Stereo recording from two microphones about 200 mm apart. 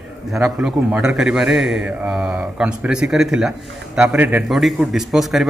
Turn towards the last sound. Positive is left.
turn(degrees=0)  # may be behind; listen again after turning